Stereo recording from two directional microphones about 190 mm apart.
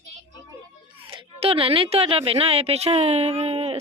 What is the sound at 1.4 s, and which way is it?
Speech, 30° right (ahead or behind).